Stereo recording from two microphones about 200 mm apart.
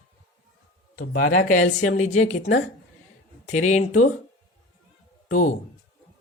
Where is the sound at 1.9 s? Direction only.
35° left (ahead or behind).